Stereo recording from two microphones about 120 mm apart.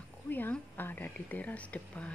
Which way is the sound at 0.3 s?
15° left (ahead or behind).